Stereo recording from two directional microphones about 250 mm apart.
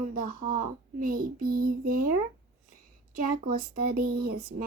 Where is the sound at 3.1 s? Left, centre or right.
Right.